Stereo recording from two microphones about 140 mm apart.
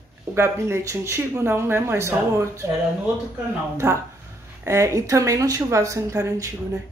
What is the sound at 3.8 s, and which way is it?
Speech, 20° right (ahead or behind).